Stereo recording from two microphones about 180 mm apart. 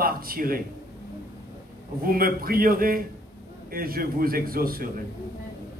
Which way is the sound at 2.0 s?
55° right (ahead or behind).